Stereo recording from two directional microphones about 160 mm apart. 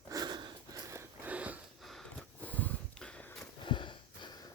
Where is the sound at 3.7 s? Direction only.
30° left (ahead or behind).